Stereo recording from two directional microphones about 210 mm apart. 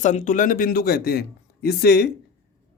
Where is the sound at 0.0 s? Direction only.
35° left (ahead or behind); by 2.0 s 50° left (ahead or behind).